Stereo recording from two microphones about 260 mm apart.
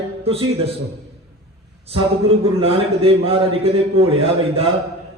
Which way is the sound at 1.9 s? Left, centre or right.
Right.